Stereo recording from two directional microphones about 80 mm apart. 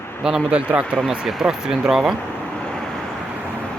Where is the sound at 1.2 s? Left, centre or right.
Centre.